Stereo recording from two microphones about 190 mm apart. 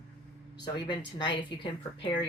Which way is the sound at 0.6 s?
25° left (ahead or behind).